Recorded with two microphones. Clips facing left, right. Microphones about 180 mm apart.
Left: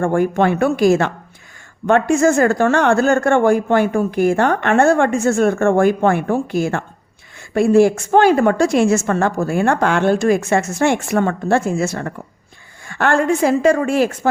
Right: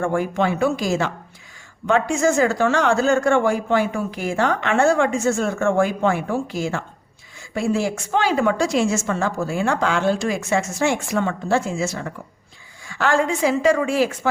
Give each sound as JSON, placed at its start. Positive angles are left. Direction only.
{"t": 0.0, "sound": "a woman's voice", "side_deg": 50}